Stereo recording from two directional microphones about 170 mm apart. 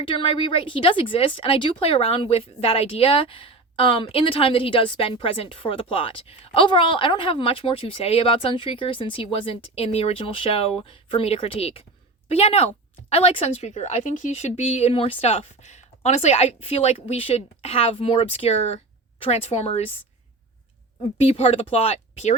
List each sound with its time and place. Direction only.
0.0 s a woman's voice: 30° left (ahead or behind)
21.0 s a woman's voice: 40° left (ahead or behind)